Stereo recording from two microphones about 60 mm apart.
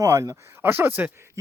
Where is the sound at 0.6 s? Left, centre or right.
Right.